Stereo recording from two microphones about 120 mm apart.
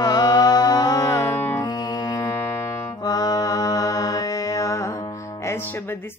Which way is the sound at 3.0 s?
30° left (ahead or behind).